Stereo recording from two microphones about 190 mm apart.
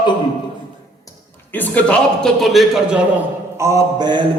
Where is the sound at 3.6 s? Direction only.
15° right (ahead or behind).